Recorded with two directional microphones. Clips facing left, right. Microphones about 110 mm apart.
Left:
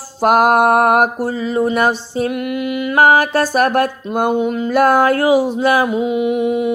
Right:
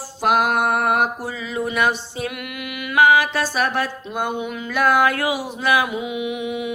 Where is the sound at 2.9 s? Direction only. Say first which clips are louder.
Left 3 dB; 40° left (ahead or behind).